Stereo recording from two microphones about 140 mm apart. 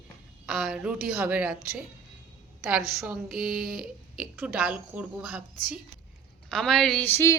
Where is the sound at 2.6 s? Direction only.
5° right (ahead or behind).